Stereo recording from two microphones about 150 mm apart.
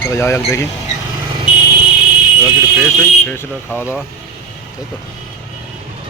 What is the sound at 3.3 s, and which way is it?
Speech, 15° left (ahead or behind).